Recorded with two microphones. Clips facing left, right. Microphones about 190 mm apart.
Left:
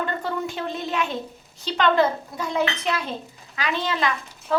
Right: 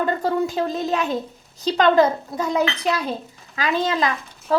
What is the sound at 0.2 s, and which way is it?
Speech, 40° right (ahead or behind).